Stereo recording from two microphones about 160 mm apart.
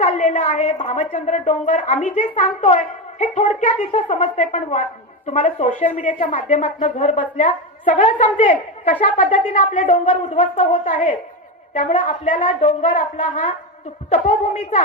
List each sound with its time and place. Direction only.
0.0 s a woman's voice: 50° left (ahead or behind)
14.1 s a woman's voice: 45° left (ahead or behind)